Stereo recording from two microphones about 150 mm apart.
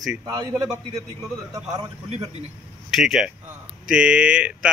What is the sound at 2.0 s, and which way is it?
Speech, 45° right (ahead or behind).